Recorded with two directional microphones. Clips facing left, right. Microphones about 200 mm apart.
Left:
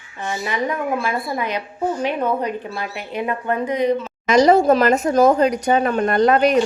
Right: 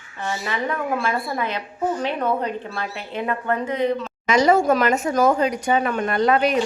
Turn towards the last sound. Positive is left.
turn(degrees=40)  # may be behind; listen again after turning